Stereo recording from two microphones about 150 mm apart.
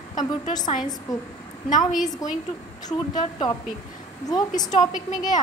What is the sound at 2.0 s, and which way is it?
Speech, 25° left (ahead or behind).